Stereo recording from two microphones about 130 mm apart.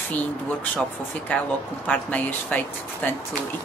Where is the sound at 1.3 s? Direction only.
10° left (ahead or behind).